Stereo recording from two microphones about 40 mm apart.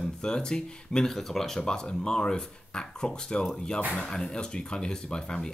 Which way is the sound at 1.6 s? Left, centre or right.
Left.